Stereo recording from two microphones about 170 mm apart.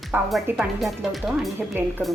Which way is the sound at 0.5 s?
Centre (ahead or behind).